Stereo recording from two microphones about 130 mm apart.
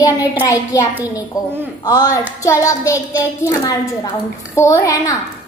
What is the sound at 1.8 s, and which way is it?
A woman's voice, 25° left (ahead or behind).